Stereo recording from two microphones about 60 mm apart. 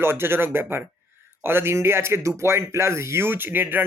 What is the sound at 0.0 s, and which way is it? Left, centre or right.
Speech, right.